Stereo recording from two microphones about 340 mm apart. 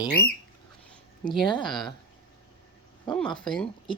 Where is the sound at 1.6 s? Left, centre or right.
Centre.